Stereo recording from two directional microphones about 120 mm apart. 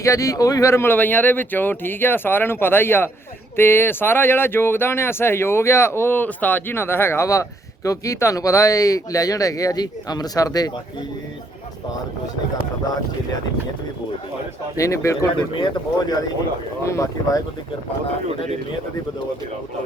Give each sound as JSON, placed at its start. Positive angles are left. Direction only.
{"t": 0.0, "sound": "speech", "side_deg": 25}
{"t": 14.8, "sound": "speech", "side_deg": 25}
{"t": 15.5, "sound": "speech", "side_deg": 40}
{"t": 16.8, "sound": "speech", "side_deg": 25}